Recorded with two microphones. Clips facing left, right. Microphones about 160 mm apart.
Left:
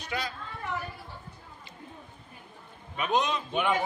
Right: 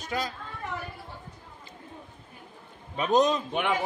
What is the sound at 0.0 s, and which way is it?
Speech, 45° right (ahead or behind).